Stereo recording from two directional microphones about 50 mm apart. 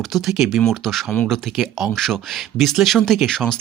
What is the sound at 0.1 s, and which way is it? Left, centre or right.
Speech, centre.